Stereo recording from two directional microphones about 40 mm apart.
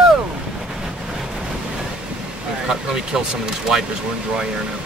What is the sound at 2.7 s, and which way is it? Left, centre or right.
Speech, centre.